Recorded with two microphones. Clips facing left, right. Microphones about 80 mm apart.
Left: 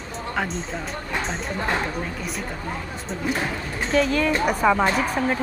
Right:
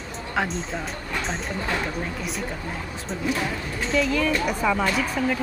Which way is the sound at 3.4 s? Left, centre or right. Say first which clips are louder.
Left 1 dB; left.